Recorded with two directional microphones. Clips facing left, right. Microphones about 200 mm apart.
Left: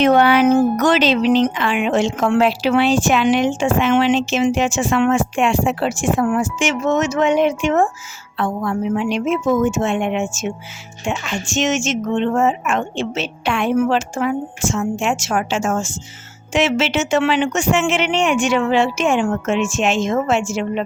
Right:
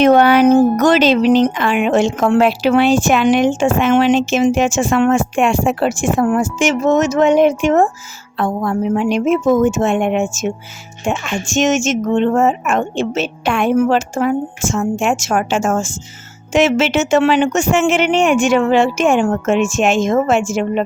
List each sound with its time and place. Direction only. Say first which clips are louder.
0.0 s a woman's voice: right 3 dB; 45° right (ahead or behind)